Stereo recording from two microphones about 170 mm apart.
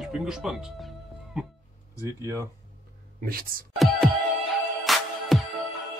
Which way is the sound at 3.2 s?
60° right (ahead or behind).